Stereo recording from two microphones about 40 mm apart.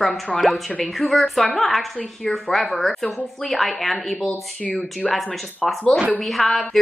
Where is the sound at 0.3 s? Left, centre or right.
Left.